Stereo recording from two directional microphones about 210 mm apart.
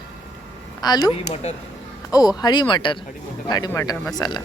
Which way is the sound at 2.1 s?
15° left (ahead or behind).